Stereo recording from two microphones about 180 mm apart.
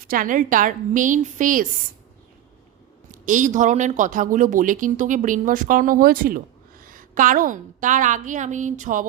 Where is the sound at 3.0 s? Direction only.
45° right (ahead or behind).